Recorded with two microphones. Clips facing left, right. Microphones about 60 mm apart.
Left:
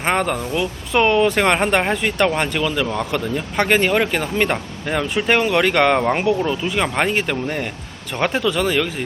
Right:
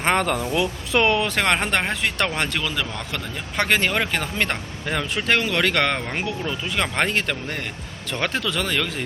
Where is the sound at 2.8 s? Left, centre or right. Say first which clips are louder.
Left 9 dB; left.